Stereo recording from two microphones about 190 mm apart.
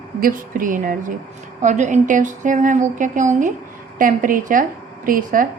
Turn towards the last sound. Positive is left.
turn(degrees=-45)  # may be behind; listen again after turning